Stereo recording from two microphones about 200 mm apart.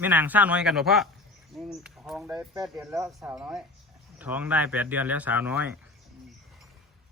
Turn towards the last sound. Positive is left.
turn(degrees=-5)  # may be behind; listen again after turning